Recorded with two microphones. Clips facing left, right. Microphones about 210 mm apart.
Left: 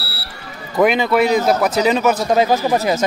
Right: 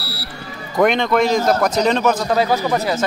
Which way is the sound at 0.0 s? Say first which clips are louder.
Right 3 dB; 30° left (ahead or behind).